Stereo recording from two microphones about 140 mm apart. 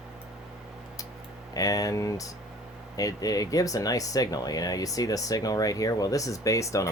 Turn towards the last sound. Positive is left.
turn(degrees=20)  # may be behind; listen again after turning